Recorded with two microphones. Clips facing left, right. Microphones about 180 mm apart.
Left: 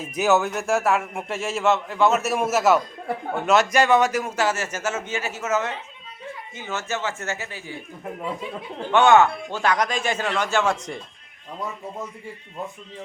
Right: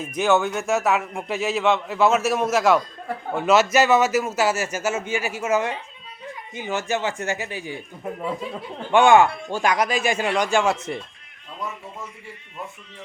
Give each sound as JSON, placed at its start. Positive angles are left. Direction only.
{"t": 0.0, "sound": "a man's voice", "side_deg": 5}
{"t": 8.9, "sound": "a man's voice", "side_deg": -10}